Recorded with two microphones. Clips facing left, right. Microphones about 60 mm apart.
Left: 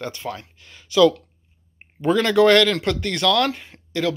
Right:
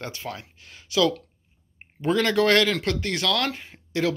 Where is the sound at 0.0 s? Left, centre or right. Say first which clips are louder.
Left 4 dB; centre.